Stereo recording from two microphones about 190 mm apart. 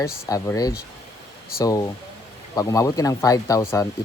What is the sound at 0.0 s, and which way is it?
Speech, 15° left (ahead or behind).